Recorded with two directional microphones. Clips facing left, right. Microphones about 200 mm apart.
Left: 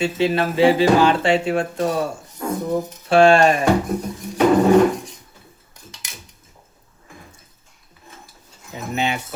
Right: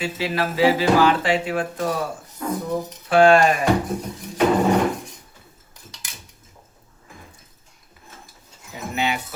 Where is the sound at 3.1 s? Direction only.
30° left (ahead or behind).